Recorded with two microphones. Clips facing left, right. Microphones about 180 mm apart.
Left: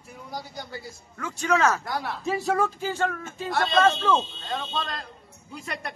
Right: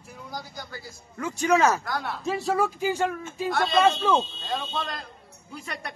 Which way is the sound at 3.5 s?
Centre (ahead or behind).